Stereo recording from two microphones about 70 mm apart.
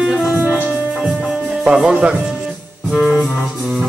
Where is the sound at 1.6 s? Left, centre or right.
Centre.